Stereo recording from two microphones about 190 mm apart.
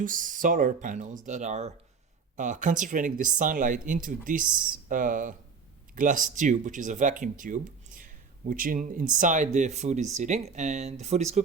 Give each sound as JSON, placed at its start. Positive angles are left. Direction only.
{"t": 0.0, "sound": "speech", "side_deg": -45}